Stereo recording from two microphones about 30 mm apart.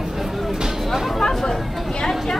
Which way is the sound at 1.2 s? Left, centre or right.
Centre.